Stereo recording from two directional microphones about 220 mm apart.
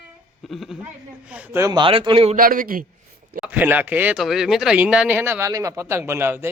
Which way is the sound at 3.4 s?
5° right (ahead or behind).